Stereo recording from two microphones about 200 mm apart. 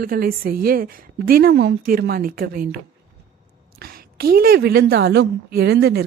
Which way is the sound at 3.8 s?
50° right (ahead or behind).